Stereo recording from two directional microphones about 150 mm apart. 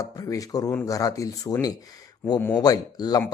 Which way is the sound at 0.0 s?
25° left (ahead or behind).